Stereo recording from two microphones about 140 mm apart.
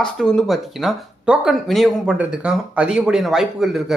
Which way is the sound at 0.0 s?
5° left (ahead or behind).